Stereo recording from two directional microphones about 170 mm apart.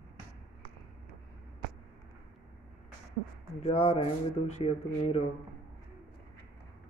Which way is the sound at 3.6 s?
35° left (ahead or behind).